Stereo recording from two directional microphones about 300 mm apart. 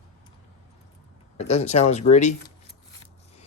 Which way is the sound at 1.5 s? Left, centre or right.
Left.